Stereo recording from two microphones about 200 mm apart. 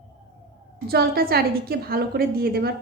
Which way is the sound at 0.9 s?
50° right (ahead or behind).